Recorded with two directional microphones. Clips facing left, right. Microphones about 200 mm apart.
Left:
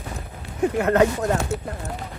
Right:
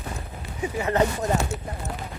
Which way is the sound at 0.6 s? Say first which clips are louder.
Left 5 dB; 60° left (ahead or behind).